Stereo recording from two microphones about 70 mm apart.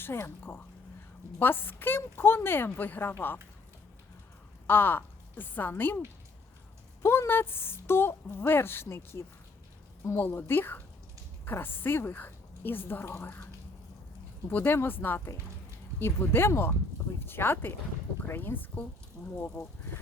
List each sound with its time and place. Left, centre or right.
0.0 s a woman's voice: left
4.6 s a woman's voice: left
7.0 s a woman's voice: left
19.2 s speech: centre
19.6 s a woman's voice: left